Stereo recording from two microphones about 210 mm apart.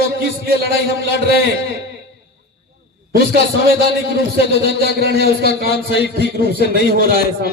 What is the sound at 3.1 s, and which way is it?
A man's voice, 45° right (ahead or behind).